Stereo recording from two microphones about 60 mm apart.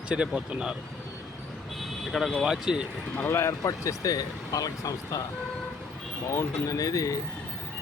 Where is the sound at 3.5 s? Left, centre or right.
Left.